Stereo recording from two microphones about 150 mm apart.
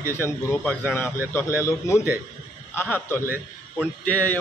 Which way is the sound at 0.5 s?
10° left (ahead or behind).